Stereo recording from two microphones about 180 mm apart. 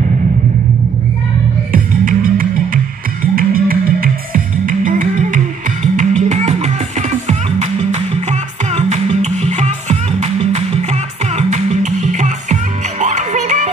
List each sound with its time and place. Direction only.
1.7 s music: 50° right (ahead or behind)